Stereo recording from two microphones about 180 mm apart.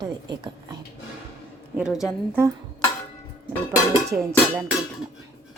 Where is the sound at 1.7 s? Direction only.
5° right (ahead or behind).